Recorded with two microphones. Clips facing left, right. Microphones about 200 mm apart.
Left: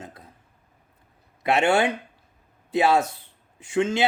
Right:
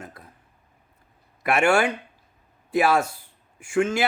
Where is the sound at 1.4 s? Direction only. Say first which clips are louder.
Even; 20° left (ahead or behind).